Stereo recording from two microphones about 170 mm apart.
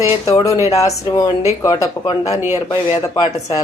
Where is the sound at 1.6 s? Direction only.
25° left (ahead or behind).